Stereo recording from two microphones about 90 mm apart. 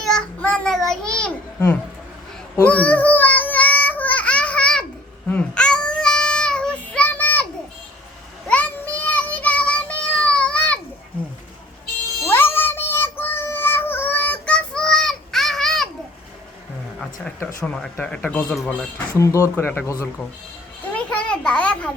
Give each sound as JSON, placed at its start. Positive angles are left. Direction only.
{"t": 0.0, "sound": "child singing", "side_deg": 10}
{"t": 1.5, "sound": "speech", "side_deg": 25}
{"t": 2.6, "sound": "child singing", "side_deg": 15}
{"t": 8.4, "sound": "child singing", "side_deg": 15}
{"t": 12.3, "sound": "child singing", "side_deg": 25}
{"t": 17.9, "sound": "speech", "side_deg": 15}
{"t": 18.5, "sound": "speech", "side_deg": 5}
{"t": 18.9, "sound": "speech", "side_deg": 35}
{"t": 19.5, "sound": "speech", "side_deg": 25}
{"t": 20.9, "sound": "a sound", "side_deg": 15}